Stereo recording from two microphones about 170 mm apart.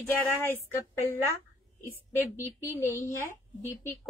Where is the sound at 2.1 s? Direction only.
15° left (ahead or behind).